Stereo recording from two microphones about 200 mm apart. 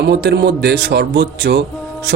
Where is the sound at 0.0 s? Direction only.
60° right (ahead or behind).